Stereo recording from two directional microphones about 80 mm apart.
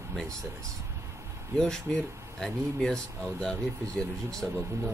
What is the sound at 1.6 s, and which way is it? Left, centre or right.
Speech, centre.